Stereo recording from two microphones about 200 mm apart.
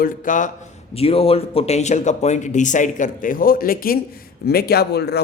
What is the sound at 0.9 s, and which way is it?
A man's voice, 30° left (ahead or behind).